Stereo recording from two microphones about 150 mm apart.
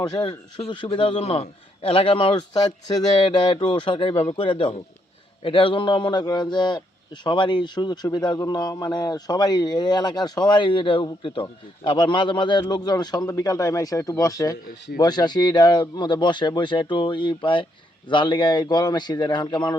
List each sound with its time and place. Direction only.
0.0 s a man's voice: 30° left (ahead or behind)